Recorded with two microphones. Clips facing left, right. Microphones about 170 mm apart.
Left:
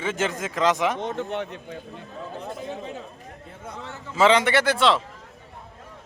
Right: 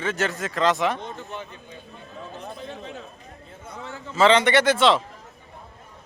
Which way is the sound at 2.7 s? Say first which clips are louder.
Left 3 dB; 15° left (ahead or behind).